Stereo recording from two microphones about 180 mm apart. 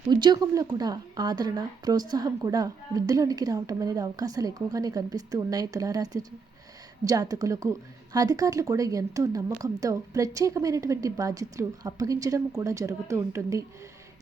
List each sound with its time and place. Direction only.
0.1 s speech: 25° right (ahead or behind)